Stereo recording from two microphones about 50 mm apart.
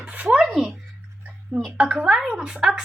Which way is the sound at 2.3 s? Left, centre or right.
Centre.